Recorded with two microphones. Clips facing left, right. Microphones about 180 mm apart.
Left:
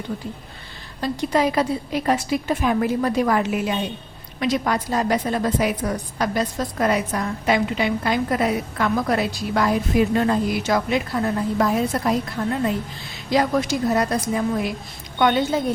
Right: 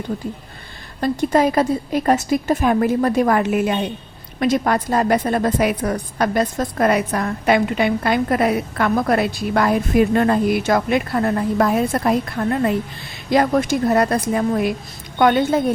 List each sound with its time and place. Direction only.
1.0 s a woman's voice: 50° right (ahead or behind)